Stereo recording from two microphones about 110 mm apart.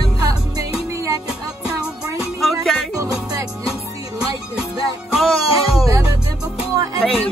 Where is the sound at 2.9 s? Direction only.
30° right (ahead or behind).